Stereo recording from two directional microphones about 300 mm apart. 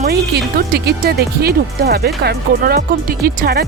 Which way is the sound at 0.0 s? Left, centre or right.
Right.